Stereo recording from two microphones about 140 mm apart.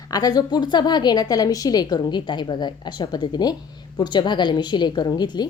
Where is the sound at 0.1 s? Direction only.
30° left (ahead or behind).